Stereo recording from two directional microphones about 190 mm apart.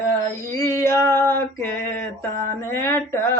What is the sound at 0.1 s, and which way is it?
Female singing, 15° left (ahead or behind).